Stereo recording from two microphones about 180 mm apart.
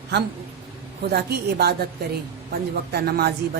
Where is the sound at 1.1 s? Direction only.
60° right (ahead or behind).